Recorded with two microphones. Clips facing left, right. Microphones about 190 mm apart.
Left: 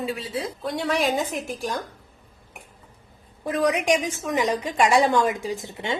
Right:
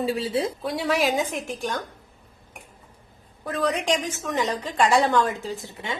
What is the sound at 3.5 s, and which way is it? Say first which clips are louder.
A woman's voice: left 3 dB; 15° left (ahead or behind).